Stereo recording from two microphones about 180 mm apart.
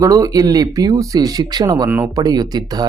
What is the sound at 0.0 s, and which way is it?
Speech, 20° right (ahead or behind).